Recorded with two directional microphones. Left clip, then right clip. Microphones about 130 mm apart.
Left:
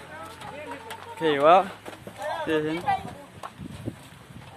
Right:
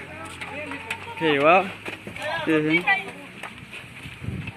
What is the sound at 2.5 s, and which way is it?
Speech, centre (ahead or behind).